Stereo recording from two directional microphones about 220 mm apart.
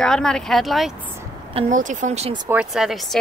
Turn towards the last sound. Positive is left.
turn(degrees=0)  # may be behind; listen again after turning